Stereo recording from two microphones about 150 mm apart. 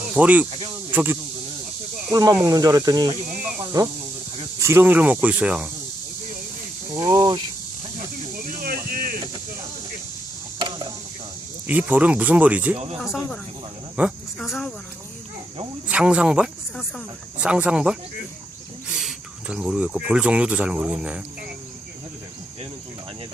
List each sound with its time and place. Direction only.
0.1 s speech: 10° right (ahead or behind)
6.9 s speech: 25° right (ahead or behind)
8.4 s a sound: 70° right (ahead or behind)
11.6 s speech: 10° right (ahead or behind)
12.7 s speech: 45° right (ahead or behind)
13.0 s speech: centre (ahead or behind)
14.0 s speech: 10° right (ahead or behind)
15.9 s speech: 5° right (ahead or behind)
19.0 s speech: 5° right (ahead or behind)